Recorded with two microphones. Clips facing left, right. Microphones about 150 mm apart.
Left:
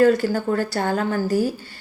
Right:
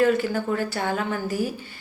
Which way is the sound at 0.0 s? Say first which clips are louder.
Left 4 dB; 40° left (ahead or behind).